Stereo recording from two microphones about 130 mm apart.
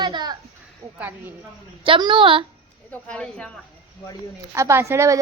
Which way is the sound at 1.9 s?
35° right (ahead or behind).